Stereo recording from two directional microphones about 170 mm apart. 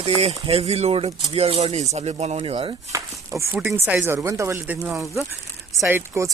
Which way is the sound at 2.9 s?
15° right (ahead or behind).